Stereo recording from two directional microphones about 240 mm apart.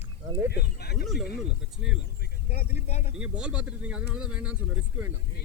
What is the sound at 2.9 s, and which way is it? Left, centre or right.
Speech, left.